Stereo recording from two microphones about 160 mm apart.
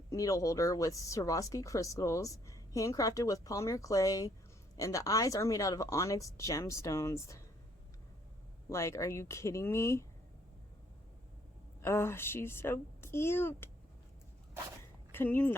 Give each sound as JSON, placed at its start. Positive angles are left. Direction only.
{"t": 0.1, "sound": "speech", "side_deg": 20}
{"t": 8.7, "sound": "a woman's voice", "side_deg": 20}
{"t": 11.8, "sound": "a woman's voice", "side_deg": 15}
{"t": 15.1, "sound": "speech", "side_deg": 10}